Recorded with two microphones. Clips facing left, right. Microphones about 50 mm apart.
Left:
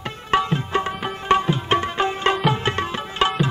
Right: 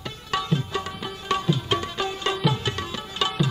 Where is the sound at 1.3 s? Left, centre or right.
Left.